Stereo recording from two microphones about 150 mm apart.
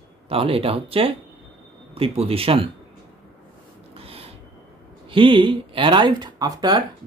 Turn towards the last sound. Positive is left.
turn(degrees=-30)  # may be behind; listen again after turning